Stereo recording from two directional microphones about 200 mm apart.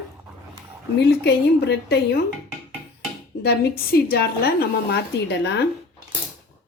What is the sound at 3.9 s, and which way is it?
A woman's voice, 50° left (ahead or behind).